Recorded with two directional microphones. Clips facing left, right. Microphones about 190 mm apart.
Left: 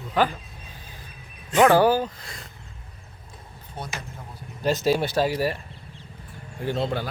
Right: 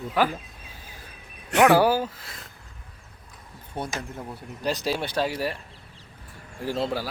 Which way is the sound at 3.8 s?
60° right (ahead or behind).